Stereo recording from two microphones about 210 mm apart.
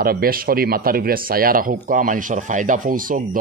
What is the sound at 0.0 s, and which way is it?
A man's voice, 45° right (ahead or behind).